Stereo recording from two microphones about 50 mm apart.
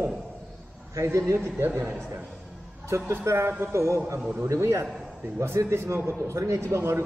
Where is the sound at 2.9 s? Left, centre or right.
Right.